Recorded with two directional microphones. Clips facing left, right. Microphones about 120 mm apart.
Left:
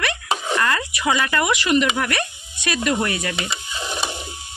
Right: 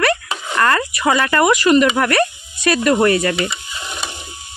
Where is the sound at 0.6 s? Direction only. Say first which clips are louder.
Right 5 dB; 55° right (ahead or behind).